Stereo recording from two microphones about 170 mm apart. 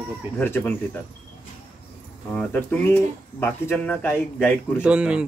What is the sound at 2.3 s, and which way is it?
Speech, 10° left (ahead or behind).